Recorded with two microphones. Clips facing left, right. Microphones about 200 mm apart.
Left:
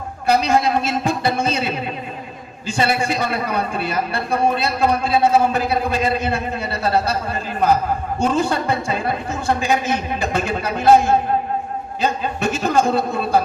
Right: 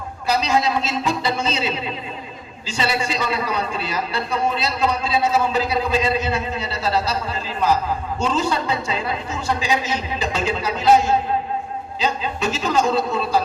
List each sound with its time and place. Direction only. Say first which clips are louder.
0.3 s a man's voice: left 3 dB; 55° left (ahead or behind)